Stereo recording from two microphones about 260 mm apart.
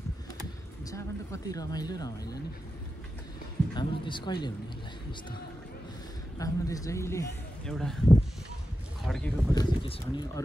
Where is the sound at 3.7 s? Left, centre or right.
Centre.